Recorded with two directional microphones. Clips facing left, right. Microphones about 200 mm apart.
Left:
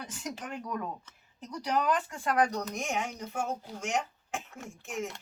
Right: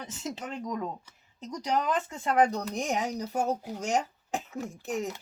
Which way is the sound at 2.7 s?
35° right (ahead or behind).